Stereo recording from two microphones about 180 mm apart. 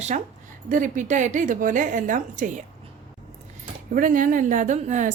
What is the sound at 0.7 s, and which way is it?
A woman's voice, 45° right (ahead or behind).